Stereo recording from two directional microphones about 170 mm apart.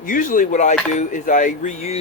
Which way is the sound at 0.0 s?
50° left (ahead or behind).